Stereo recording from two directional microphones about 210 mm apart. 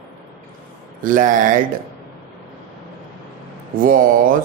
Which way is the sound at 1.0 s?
40° right (ahead or behind).